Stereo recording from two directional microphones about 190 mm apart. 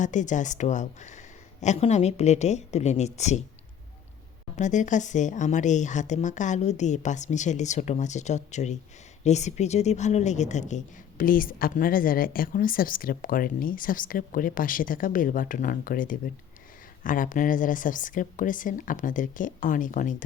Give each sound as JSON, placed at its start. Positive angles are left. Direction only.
{"t": 0.0, "sound": "speech", "side_deg": 40}
{"t": 4.5, "sound": "a woman's voice", "side_deg": 40}